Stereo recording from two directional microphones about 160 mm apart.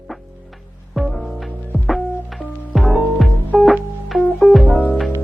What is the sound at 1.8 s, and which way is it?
Music, 5° left (ahead or behind).